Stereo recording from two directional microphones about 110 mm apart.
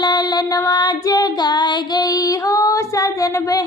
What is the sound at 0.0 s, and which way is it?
Child singing, 35° left (ahead or behind).